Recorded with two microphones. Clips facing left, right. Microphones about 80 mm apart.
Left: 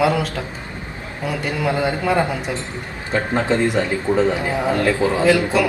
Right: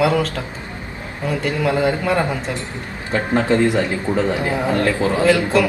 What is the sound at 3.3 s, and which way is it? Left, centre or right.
A man's voice, left.